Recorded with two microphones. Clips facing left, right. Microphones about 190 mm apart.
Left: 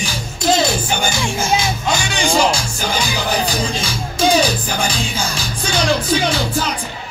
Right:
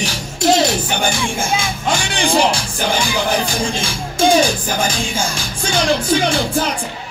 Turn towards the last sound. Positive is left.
turn(degrees=-50)  # may be behind; listen again after turning